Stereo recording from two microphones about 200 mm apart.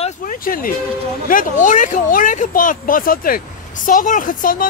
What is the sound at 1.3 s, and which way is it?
A woman's voice, 40° left (ahead or behind).